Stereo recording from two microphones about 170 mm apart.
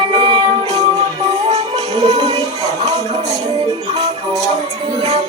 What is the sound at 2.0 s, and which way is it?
Music, 40° right (ahead or behind).